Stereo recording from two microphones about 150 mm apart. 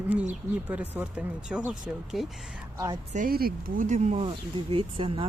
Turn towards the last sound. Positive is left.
turn(degrees=-40)  # may be behind; listen again after turning